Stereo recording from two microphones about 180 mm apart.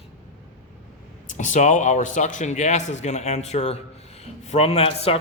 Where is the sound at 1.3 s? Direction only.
45° left (ahead or behind).